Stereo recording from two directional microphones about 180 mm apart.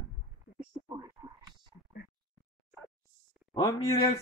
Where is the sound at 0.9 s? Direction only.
20° right (ahead or behind).